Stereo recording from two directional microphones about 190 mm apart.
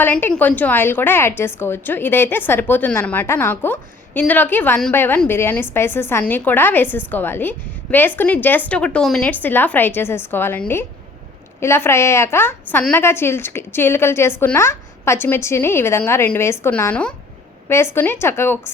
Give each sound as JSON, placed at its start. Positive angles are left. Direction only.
{"t": 0.0, "sound": "a woman's voice", "side_deg": 10}